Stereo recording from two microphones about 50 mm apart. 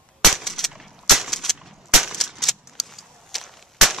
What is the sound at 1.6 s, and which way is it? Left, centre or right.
Gunshot, centre.